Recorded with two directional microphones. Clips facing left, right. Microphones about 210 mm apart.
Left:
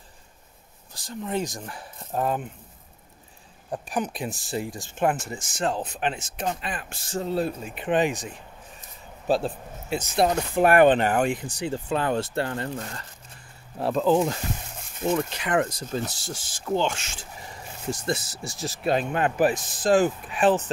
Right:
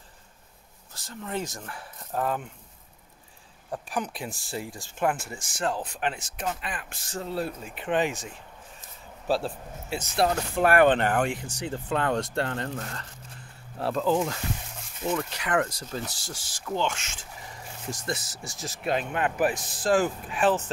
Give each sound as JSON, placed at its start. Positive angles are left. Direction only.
{"t": 0.9, "sound": "speech", "side_deg": 15}
{"t": 3.7, "sound": "speech", "side_deg": 20}
{"t": 19.8, "sound": "speech", "side_deg": 20}